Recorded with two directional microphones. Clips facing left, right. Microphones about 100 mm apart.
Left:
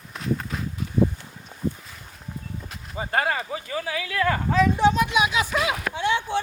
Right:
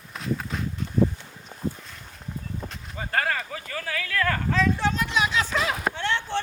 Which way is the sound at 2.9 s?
20° left (ahead or behind).